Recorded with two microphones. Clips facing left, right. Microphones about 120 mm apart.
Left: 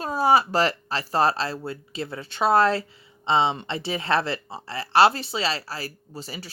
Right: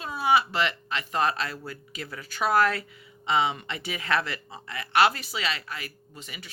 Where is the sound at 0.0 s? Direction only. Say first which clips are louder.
Left 4 dB; 40° left (ahead or behind).